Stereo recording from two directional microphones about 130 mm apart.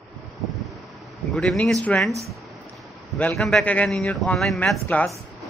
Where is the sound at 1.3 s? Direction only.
5° left (ahead or behind).